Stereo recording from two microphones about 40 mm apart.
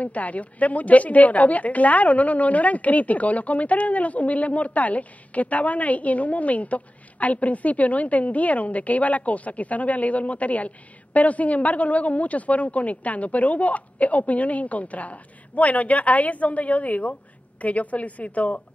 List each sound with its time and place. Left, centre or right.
0.0 s a woman's voice: left